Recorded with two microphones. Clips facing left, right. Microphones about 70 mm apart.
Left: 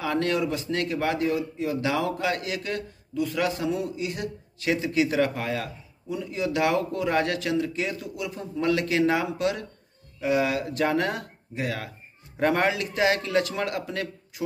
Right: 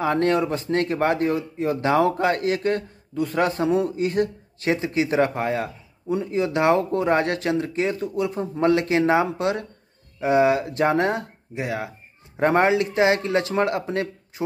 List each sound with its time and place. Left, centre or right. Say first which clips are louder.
0.0 s a man's voice: right 5 dB; right